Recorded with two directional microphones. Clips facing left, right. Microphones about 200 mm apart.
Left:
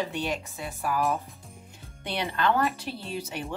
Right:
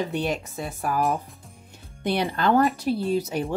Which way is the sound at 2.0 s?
45° right (ahead or behind).